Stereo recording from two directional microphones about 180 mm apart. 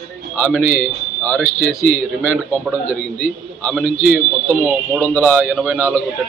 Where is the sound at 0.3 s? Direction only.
10° left (ahead or behind).